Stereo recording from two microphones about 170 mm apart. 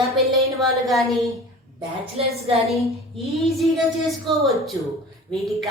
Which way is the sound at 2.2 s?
35° right (ahead or behind).